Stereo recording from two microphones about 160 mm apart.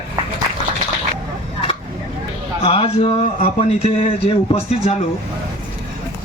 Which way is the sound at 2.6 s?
35° left (ahead or behind).